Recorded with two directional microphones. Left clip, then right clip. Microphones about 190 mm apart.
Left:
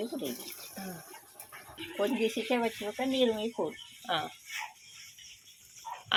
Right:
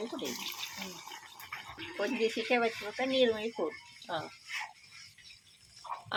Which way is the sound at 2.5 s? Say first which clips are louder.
Right 3 dB; 35° left (ahead or behind).